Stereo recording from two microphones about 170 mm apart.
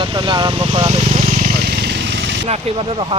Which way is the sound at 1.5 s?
75° right (ahead or behind).